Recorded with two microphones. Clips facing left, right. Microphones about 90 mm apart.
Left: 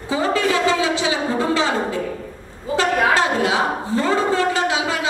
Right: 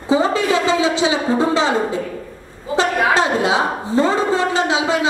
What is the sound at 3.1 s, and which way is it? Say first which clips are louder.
A woman's voice: right 2 dB; 20° right (ahead or behind).